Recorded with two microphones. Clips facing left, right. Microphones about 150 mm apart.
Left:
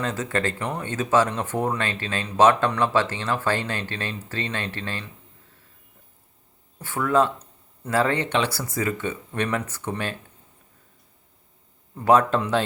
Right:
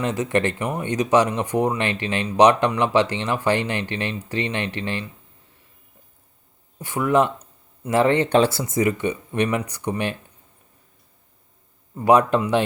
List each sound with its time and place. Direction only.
0.0 s speech: 15° right (ahead or behind)
6.7 s speech: 15° right (ahead or behind)
11.9 s speech: 15° right (ahead or behind)